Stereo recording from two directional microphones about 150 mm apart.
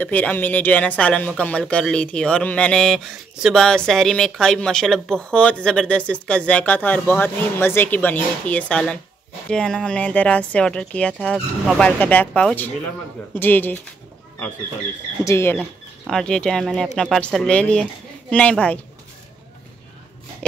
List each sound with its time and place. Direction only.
0.0 s speech: 10° left (ahead or behind)
15.2 s speech: 20° left (ahead or behind)
16.1 s speech: 5° left (ahead or behind)